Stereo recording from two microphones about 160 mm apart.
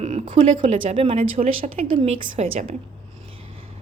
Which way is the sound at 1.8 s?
45° right (ahead or behind).